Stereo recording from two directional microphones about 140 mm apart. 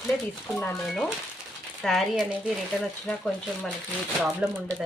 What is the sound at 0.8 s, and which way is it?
Speech, 5° left (ahead or behind).